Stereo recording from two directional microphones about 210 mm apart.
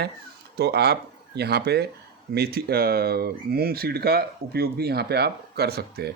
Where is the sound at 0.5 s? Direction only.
50° right (ahead or behind).